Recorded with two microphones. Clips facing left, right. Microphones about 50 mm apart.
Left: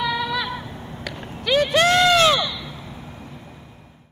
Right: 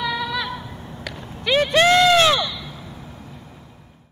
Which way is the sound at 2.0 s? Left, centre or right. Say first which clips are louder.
Right 1 dB; centre.